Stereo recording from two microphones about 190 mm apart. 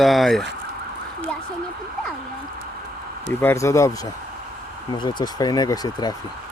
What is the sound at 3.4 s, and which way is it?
Speech, 15° left (ahead or behind).